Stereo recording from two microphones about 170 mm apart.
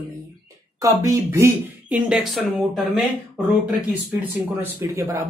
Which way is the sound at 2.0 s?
Centre (ahead or behind).